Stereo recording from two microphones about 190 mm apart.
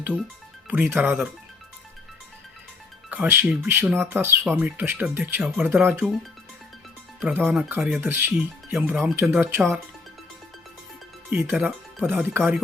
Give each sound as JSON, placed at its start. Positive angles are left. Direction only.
{"t": 0.7, "sound": "speech", "side_deg": -10}
{"t": 3.1, "sound": "speech", "side_deg": -10}
{"t": 7.2, "sound": "speech", "side_deg": -10}
{"t": 11.3, "sound": "speech", "side_deg": -10}